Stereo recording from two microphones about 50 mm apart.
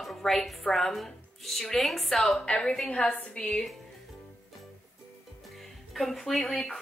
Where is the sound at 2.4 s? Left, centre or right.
Centre.